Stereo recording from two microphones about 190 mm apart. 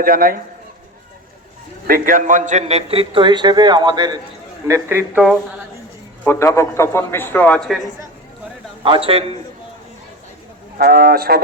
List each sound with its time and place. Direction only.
0.0 s a man's voice: 50° right (ahead or behind)
1.9 s a man's voice: 45° right (ahead or behind); by 5.2 s 15° right (ahead or behind)
6.2 s a man's voice: 15° left (ahead or behind)
8.8 s a man's voice: 30° right (ahead or behind)
10.8 s a man's voice: 50° right (ahead or behind)